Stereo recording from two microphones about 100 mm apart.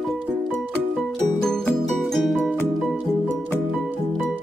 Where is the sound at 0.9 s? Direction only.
Centre (ahead or behind).